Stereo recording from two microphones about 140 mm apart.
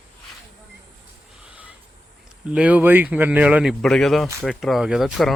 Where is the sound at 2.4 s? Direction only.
10° right (ahead or behind).